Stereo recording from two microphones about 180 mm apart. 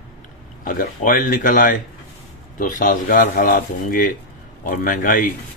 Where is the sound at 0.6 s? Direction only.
50° left (ahead or behind).